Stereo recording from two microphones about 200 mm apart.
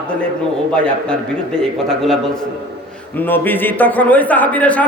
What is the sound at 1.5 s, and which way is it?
A man's voice, centre (ahead or behind).